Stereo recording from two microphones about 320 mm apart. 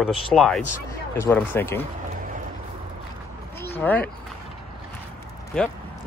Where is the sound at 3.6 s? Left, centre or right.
Centre.